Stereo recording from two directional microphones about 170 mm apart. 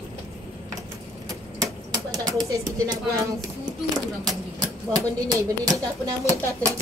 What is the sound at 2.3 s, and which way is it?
Speech, 20° right (ahead or behind).